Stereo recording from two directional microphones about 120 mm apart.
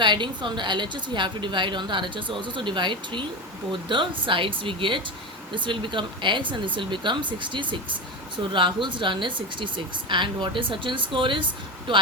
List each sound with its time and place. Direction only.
0.0 s a woman's voice: 40° right (ahead or behind)